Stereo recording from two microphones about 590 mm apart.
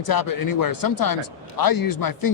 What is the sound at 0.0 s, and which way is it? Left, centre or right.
A man's voice, left.